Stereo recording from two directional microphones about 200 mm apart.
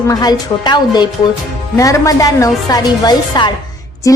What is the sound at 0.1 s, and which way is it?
A woman's voice, 20° left (ahead or behind).